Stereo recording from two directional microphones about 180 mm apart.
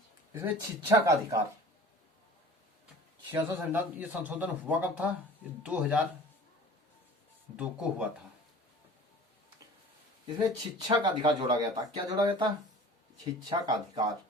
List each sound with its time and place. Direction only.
0.3 s a man's voice: 15° right (ahead or behind)
3.3 s a man's voice: 10° right (ahead or behind)
7.5 s a man's voice: 5° right (ahead or behind)
10.8 s speech: 25° right (ahead or behind)
13.5 s speech: 25° right (ahead or behind)